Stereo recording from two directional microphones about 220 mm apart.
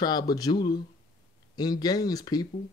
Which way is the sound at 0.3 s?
20° left (ahead or behind).